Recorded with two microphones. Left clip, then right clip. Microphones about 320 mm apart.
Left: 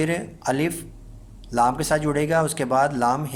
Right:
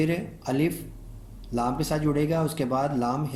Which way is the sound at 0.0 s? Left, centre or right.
Left.